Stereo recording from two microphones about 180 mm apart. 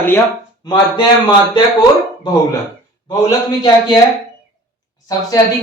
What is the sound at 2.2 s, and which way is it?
Speech, 20° left (ahead or behind).